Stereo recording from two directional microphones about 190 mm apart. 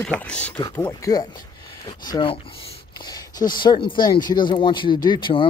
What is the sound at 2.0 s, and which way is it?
Speech, 25° left (ahead or behind).